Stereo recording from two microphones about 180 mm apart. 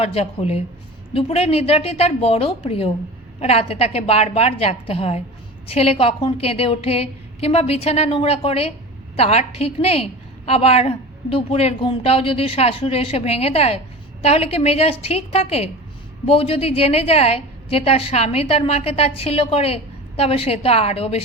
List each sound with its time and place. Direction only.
0.0 s a woman's voice: 35° left (ahead or behind)